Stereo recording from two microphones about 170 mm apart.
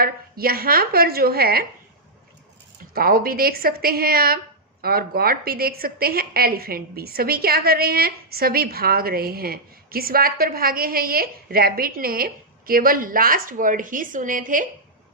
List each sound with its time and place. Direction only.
0.0 s a woman's voice: 60° right (ahead or behind)
2.9 s a woman's voice: 60° right (ahead or behind)